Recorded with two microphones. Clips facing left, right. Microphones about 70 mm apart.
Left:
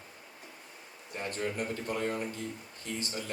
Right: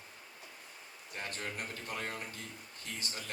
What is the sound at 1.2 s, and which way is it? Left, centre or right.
A man's voice, left.